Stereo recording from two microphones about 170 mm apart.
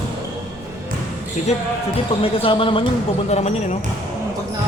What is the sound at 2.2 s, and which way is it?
Speech, 30° left (ahead or behind).